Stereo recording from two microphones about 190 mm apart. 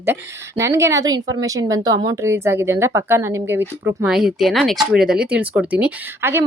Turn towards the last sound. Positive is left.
turn(degrees=-10)  # may be behind; listen again after turning